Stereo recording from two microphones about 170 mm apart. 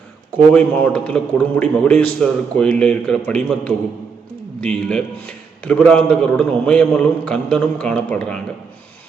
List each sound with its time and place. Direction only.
0.5 s a man's voice: 10° left (ahead or behind)